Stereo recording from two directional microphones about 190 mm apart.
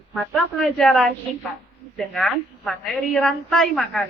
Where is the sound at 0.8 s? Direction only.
Centre (ahead or behind).